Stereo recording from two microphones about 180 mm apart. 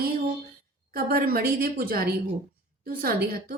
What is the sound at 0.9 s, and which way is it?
Speech, 55° right (ahead or behind).